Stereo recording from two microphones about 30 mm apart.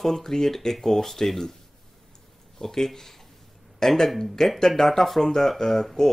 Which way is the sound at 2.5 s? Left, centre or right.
Centre.